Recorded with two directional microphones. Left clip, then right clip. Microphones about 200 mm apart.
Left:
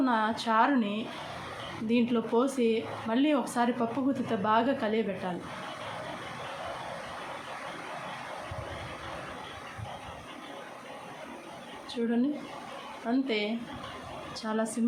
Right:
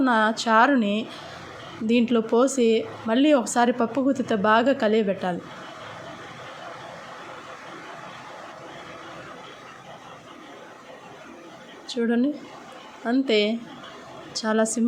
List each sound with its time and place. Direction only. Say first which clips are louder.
0.0 s speech: right 7 dB; 35° right (ahead or behind)
12.0 s speech: right 6 dB; 40° right (ahead or behind)